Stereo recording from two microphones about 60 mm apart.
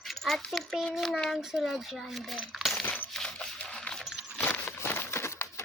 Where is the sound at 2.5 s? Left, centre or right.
Centre.